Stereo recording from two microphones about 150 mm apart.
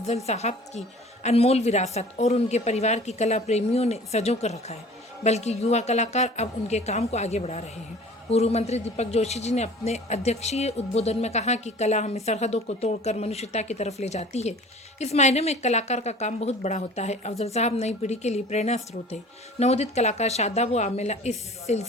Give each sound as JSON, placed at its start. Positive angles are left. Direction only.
{"t": 0.3, "sound": "a woman's voice", "side_deg": 45}